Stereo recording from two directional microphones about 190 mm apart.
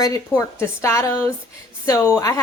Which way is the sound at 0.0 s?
15° left (ahead or behind).